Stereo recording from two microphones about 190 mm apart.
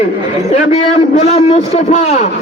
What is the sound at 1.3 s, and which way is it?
Speech, 35° left (ahead or behind).